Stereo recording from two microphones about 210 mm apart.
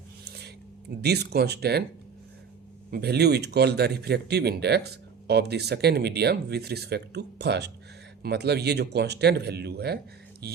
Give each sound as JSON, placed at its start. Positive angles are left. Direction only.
{"t": 0.3, "sound": "a sound", "side_deg": -50}
{"t": 1.0, "sound": "speech", "side_deg": -50}
{"t": 2.9, "sound": "speech", "side_deg": -50}